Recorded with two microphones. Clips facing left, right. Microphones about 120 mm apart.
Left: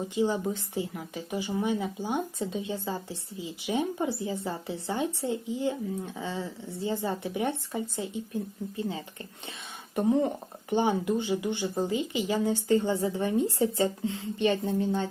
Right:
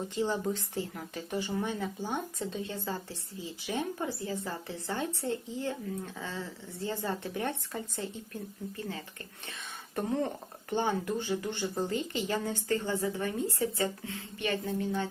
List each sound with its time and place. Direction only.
0.2 s a woman's voice: 10° left (ahead or behind); by 15.0 s 30° left (ahead or behind)